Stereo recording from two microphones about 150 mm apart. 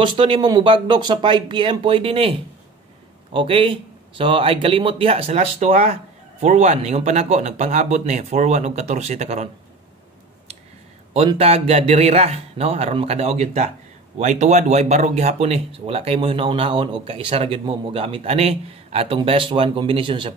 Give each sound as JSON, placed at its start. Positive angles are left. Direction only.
{"t": 0.0, "sound": "speech", "side_deg": -35}
{"t": 11.2, "sound": "speech", "side_deg": -40}